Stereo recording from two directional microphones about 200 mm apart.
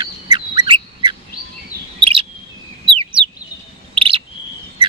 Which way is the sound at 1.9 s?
25° right (ahead or behind).